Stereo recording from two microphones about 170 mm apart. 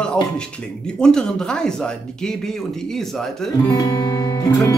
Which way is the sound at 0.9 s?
5° left (ahead or behind).